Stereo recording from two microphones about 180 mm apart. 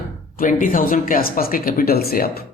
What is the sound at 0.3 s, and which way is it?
A man's voice, 50° left (ahead or behind).